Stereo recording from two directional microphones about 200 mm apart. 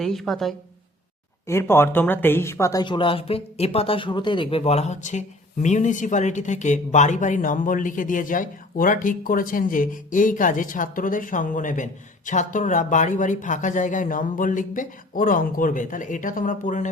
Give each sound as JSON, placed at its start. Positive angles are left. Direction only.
{"t": 0.0, "sound": "a woman's voice", "side_deg": 0}
{"t": 1.5, "sound": "speech", "side_deg": 15}